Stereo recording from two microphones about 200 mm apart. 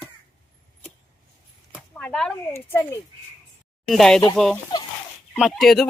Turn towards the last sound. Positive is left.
turn(degrees=0)  # may be behind; listen again after turning